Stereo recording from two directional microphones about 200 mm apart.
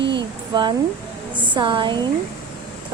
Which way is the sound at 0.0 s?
60° right (ahead or behind).